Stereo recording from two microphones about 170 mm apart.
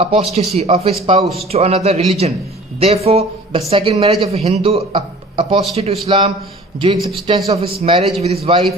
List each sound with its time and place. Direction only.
0.0 s a man's voice: 35° right (ahead or behind)